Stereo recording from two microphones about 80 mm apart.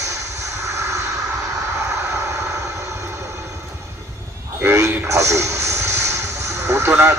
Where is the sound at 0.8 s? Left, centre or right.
Right.